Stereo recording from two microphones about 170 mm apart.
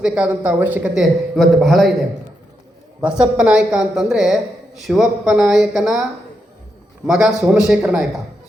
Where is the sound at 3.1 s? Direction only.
5° right (ahead or behind).